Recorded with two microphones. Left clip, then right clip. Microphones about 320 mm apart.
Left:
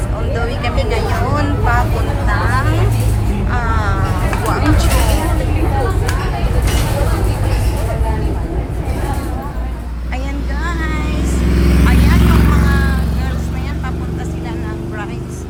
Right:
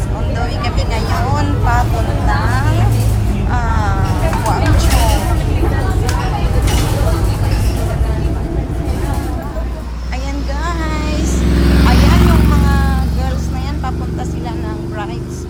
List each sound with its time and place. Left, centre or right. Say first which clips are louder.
0.3 s vehicle: left 2 dB; centre
3.5 s a sound: even; centre
11.3 s vehicle: right 1 dB; right
11.9 s vehicle: right 2 dB; centre